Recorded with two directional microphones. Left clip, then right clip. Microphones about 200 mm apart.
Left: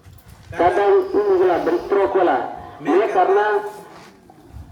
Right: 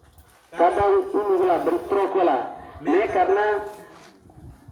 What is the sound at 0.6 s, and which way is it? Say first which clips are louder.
A man's voice: left 3 dB; 35° right (ahead or behind).